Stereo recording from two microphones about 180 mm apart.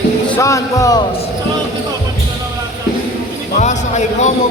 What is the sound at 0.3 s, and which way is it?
Speech, 15° left (ahead or behind).